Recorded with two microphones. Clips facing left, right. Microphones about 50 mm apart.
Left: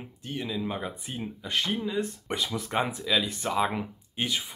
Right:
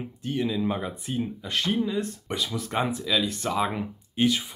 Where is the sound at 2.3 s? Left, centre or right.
Left.